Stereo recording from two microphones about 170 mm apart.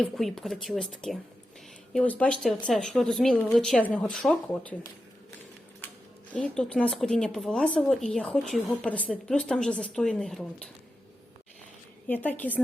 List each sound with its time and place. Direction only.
0.0 s speech: centre (ahead or behind)
6.3 s speech: 5° left (ahead or behind)
12.0 s a woman's voice: 10° left (ahead or behind)